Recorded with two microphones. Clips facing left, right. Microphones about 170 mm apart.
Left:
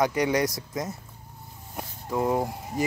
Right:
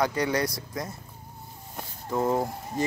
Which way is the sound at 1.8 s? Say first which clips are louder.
Even; 10° left (ahead or behind).